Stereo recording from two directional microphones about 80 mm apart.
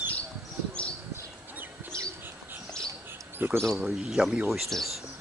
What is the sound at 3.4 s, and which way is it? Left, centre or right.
Speech, right.